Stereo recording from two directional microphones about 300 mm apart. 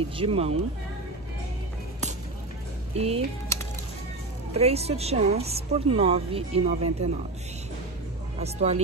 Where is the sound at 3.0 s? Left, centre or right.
Centre.